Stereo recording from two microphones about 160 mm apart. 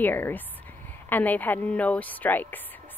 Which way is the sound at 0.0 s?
10° left (ahead or behind).